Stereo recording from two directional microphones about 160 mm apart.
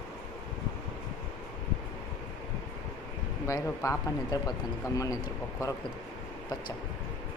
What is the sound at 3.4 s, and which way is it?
Speech, 20° left (ahead or behind).